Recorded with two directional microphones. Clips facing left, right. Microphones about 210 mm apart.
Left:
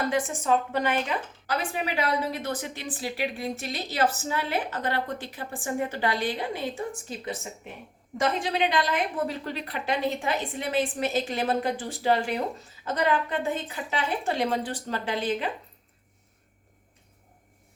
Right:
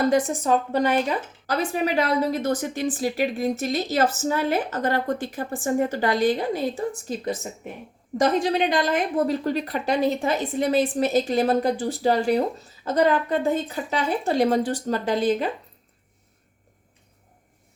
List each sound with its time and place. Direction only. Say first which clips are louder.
0.1 s a woman's voice: right 5 dB; 40° right (ahead or behind)